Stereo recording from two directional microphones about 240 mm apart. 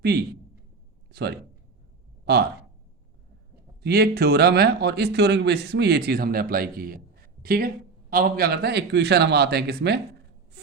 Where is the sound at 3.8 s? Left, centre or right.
Right.